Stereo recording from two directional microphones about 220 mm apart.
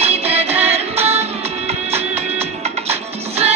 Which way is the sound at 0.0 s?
30° right (ahead or behind).